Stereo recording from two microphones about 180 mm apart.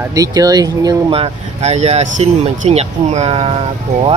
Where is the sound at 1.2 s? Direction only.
40° right (ahead or behind).